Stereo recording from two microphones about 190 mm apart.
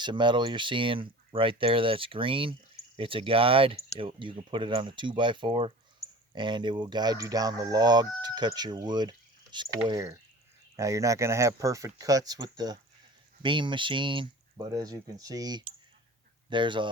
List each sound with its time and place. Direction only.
0.0 s speech: 25° right (ahead or behind)